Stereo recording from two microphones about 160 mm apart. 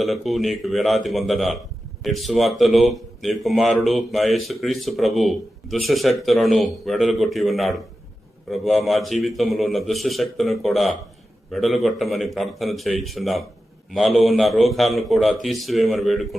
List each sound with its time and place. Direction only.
0.0 s speech: centre (ahead or behind)